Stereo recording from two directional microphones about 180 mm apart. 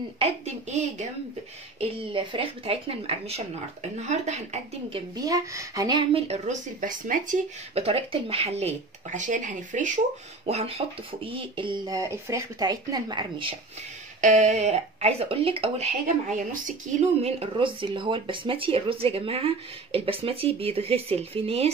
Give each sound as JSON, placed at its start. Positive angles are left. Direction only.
{"t": 0.2, "sound": "speech", "side_deg": -40}
{"t": 1.8, "sound": "speech", "side_deg": -30}
{"t": 5.1, "sound": "speech", "side_deg": -20}
{"t": 6.1, "sound": "speech", "side_deg": -35}
{"t": 7.7, "sound": "speech", "side_deg": -35}
{"t": 14.2, "sound": "speech", "side_deg": -40}